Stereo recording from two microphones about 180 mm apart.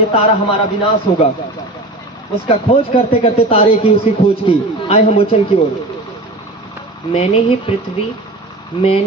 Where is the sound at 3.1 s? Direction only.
35° left (ahead or behind).